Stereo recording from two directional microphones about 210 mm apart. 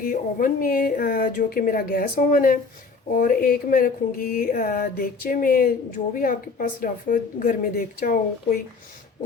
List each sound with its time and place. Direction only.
0.0 s speech: 40° left (ahead or behind)